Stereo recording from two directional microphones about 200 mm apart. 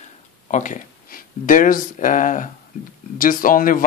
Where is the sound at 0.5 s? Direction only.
40° left (ahead or behind).